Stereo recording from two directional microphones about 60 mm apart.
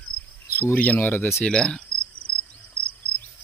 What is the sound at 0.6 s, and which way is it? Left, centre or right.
Speech, left.